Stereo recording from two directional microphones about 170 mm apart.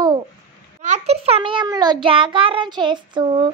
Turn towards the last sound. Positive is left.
turn(degrees=-30)  # may be behind; listen again after turning